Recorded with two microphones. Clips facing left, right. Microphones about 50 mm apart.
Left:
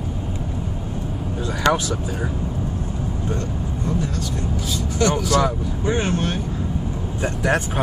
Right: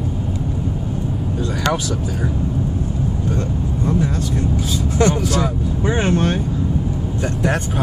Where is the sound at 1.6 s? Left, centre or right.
Centre.